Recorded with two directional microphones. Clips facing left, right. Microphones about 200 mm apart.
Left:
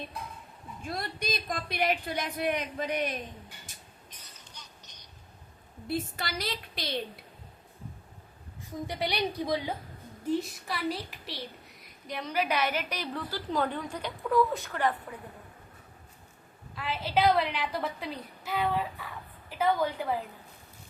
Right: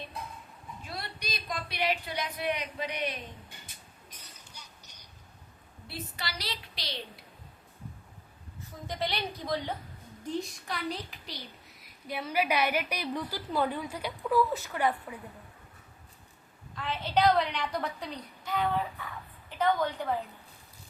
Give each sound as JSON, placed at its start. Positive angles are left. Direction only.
{"t": 0.8, "sound": "a woman's voice", "side_deg": 50}
{"t": 3.7, "sound": "a sound", "side_deg": 45}
{"t": 4.5, "sound": "a sound", "side_deg": -10}
{"t": 5.9, "sound": "a woman's voice", "side_deg": 50}
{"t": 8.9, "sound": "a woman's voice", "side_deg": 10}
{"t": 16.7, "sound": "a woman's voice", "side_deg": 10}